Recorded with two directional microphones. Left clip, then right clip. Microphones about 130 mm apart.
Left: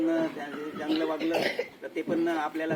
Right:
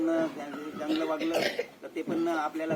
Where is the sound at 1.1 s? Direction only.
15° left (ahead or behind).